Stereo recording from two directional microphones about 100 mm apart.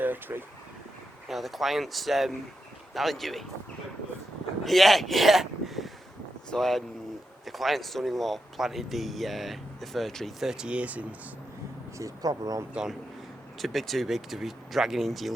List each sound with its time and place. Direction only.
0.0 s speech: 20° right (ahead or behind)
1.3 s speech: centre (ahead or behind)
4.6 s speech: centre (ahead or behind)
11.9 s speech: 35° right (ahead or behind)
12.7 s speech: 5° right (ahead or behind)